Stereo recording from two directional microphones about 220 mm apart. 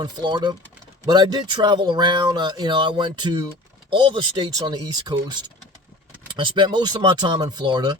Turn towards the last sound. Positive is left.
turn(degrees=-20)  # may be behind; listen again after turning